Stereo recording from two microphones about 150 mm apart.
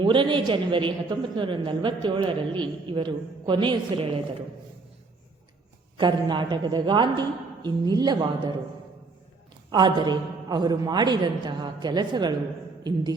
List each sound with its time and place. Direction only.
0.0 s a woman's voice: 35° right (ahead or behind)
6.0 s a man's voice: 30° right (ahead or behind)
9.7 s a man's voice: 30° right (ahead or behind)